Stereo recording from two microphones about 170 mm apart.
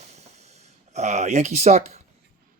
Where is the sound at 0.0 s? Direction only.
40° right (ahead or behind).